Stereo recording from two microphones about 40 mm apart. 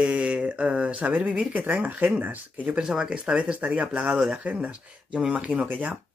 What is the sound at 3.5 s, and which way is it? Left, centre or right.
Speech, right.